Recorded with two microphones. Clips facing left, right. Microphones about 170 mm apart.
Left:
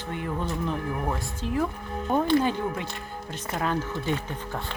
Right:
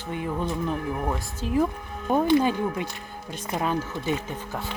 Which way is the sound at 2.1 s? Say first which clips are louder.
Right 2 dB; 15° right (ahead or behind).